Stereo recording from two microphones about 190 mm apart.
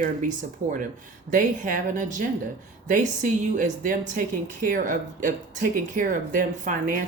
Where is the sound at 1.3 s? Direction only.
45° right (ahead or behind).